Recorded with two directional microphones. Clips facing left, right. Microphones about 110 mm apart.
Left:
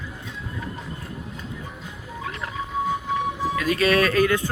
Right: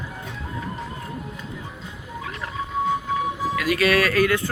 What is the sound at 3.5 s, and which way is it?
Speech, 25° left (ahead or behind).